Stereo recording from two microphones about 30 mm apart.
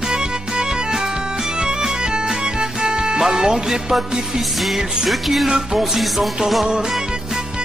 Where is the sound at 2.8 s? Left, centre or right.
Right.